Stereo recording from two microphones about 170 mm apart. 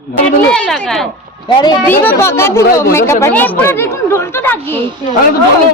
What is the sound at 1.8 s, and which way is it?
Speech, 15° left (ahead or behind).